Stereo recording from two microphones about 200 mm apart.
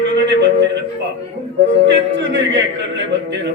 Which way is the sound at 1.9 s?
65° right (ahead or behind).